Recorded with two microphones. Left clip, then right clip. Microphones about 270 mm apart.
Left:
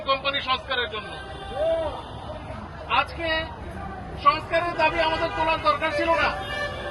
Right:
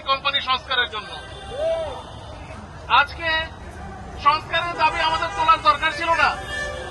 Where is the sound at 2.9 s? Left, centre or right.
Centre.